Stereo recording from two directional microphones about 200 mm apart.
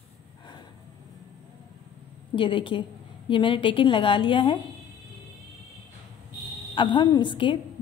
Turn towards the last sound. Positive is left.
turn(degrees=25)  # may be behind; listen again after turning